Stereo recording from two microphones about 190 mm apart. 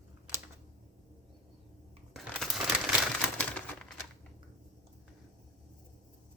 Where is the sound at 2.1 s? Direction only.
Centre (ahead or behind).